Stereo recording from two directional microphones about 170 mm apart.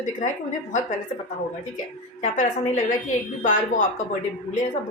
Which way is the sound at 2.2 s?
45° left (ahead or behind).